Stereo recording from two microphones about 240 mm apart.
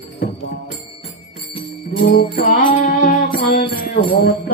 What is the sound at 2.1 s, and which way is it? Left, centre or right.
Music, left.